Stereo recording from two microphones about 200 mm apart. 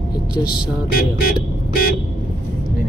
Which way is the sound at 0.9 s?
50° left (ahead or behind).